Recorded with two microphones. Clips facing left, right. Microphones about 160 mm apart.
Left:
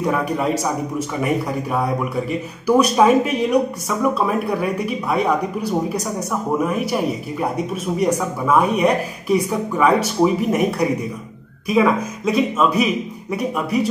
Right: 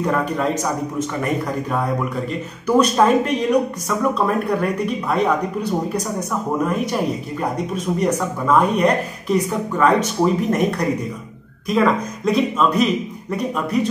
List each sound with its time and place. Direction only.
0.0 s speech: 10° left (ahead or behind)